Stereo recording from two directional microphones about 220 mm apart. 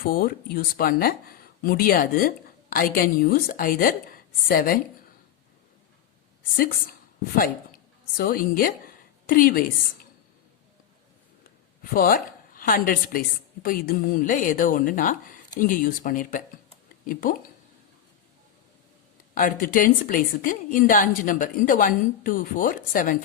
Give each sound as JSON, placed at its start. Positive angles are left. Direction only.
{"t": 0.0, "sound": "speech", "side_deg": 40}
{"t": 7.3, "sound": "speech", "side_deg": 40}
{"t": 11.8, "sound": "speech", "side_deg": 40}
{"t": 19.3, "sound": "speech", "side_deg": 40}